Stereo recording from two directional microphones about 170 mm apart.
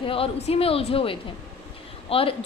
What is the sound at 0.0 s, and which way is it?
A woman's voice, 35° left (ahead or behind).